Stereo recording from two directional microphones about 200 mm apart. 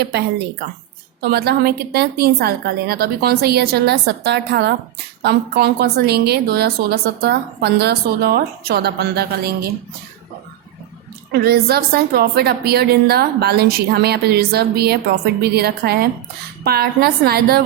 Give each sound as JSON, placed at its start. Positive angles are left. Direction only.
{"t": 0.0, "sound": "a woman's voice", "side_deg": -55}
{"t": 11.3, "sound": "a woman's voice", "side_deg": -50}